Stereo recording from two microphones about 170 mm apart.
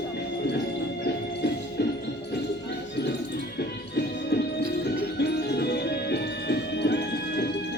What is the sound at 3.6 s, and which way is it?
Music, 75° left (ahead or behind).